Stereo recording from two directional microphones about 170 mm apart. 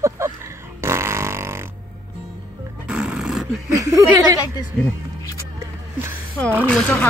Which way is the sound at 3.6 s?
15° right (ahead or behind).